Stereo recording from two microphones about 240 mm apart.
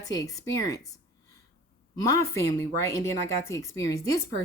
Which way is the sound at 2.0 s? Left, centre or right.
Centre.